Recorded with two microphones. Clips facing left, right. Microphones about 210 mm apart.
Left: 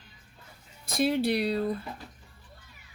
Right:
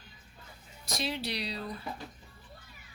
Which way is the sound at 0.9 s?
55° left (ahead or behind).